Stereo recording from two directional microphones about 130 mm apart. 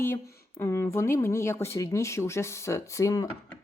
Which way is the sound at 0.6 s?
20° left (ahead or behind).